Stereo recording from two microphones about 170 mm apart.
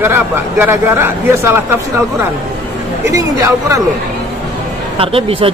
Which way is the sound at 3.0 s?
20° right (ahead or behind).